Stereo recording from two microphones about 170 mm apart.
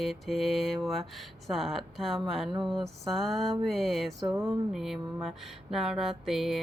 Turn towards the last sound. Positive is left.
turn(degrees=0)  # may be behind; listen again after turning